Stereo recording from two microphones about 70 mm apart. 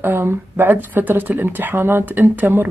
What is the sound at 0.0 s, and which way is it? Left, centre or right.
Speech, right.